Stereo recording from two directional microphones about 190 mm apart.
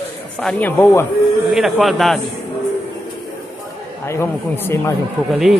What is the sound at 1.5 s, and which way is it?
Speech, centre (ahead or behind).